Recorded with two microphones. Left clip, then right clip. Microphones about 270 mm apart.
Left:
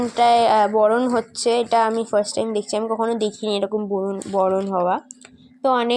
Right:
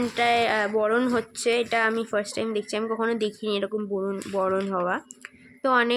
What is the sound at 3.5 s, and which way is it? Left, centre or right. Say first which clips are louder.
Speech: left 5 dB; centre.